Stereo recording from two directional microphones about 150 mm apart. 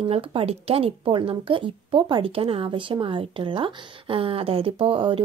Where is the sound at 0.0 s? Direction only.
40° right (ahead or behind).